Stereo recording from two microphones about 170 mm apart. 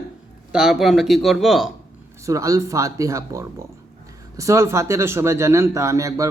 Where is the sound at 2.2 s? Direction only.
20° right (ahead or behind).